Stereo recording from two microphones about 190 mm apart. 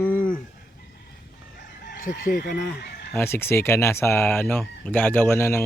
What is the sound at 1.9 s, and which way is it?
Fowl, 45° left (ahead or behind).